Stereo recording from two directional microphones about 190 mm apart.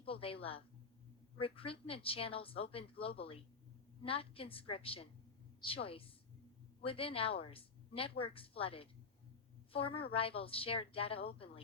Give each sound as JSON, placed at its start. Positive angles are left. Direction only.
{"t": 0.0, "sound": "a woman's voice", "side_deg": 30}